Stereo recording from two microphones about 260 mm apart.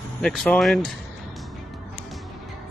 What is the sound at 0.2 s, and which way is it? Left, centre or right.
Speech, centre.